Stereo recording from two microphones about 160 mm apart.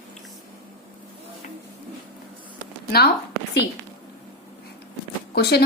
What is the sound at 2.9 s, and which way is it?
Speech, 85° left.